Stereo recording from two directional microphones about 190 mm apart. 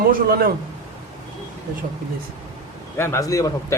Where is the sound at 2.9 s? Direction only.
15° left (ahead or behind).